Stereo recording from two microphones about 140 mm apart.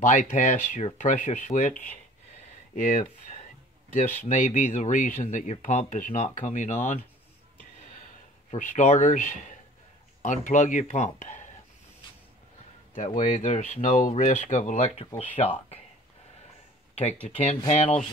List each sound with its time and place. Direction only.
0.0 s speech: 65° left (ahead or behind)
4.4 s speech: 60° left (ahead or behind)
8.5 s speech: 60° left (ahead or behind)
12.9 s speech: 65° left (ahead or behind); by 15.5 s 45° left (ahead or behind)
16.9 s speech: 50° left (ahead or behind)